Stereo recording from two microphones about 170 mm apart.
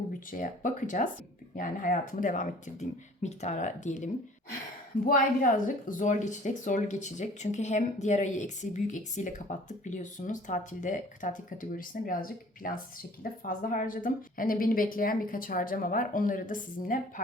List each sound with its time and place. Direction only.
0.3 s a woman's voice: 50° left (ahead or behind)